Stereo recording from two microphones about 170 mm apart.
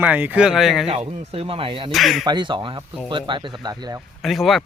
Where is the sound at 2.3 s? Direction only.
25° right (ahead or behind).